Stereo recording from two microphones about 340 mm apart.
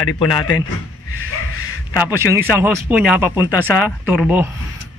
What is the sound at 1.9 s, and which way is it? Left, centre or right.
Speech, centre.